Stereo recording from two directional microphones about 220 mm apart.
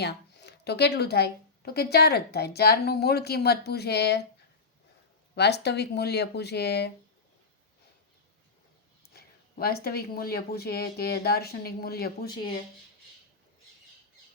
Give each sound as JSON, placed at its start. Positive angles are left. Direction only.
{"t": 0.0, "sound": "a woman's voice", "side_deg": 50}
{"t": 5.3, "sound": "a woman's voice", "side_deg": 50}
{"t": 9.0, "sound": "a woman's voice", "side_deg": 45}